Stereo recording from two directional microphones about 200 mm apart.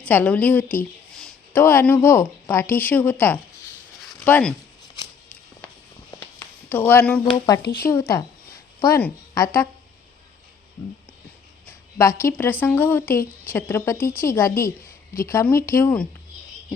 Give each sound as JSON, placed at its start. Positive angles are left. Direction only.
{"t": 0.0, "sound": "a woman's voice", "side_deg": 5}
{"t": 4.0, "sound": "a sound", "side_deg": 10}
{"t": 6.7, "sound": "speech", "side_deg": 10}
{"t": 7.6, "sound": "speech", "side_deg": 50}
{"t": 8.8, "sound": "a woman's voice", "side_deg": 10}
{"t": 11.9, "sound": "speech", "side_deg": 15}